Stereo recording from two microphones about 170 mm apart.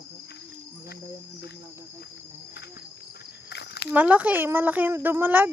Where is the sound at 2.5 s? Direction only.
75° left (ahead or behind).